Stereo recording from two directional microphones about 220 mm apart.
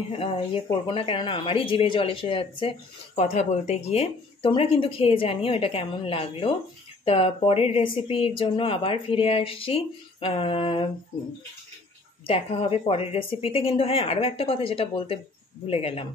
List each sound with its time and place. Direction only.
0.1 s speech: 25° left (ahead or behind)
12.3 s speech: 25° left (ahead or behind)